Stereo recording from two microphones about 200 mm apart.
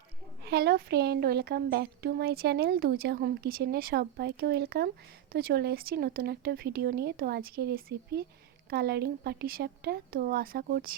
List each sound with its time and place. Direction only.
0.4 s speech: 50° right (ahead or behind)